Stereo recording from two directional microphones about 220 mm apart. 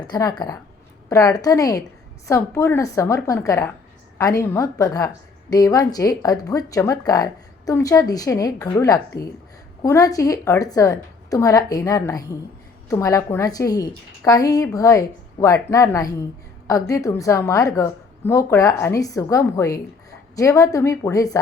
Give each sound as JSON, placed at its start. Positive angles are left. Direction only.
{"t": 0.1, "sound": "a woman's voice", "side_deg": 20}